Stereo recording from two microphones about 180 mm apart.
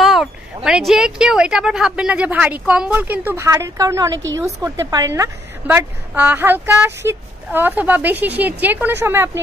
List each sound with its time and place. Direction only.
0.0 s a woman's voice: centre (ahead or behind)